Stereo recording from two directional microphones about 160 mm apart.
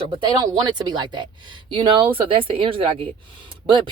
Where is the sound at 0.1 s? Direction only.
30° right (ahead or behind).